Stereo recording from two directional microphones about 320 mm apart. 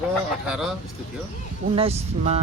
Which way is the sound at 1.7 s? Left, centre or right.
Centre.